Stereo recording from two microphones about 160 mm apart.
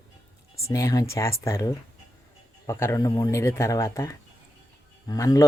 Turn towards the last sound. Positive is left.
turn(degrees=20)  # may be behind; listen again after turning